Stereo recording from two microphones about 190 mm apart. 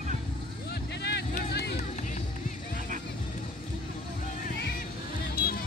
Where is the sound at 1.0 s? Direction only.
60° left (ahead or behind).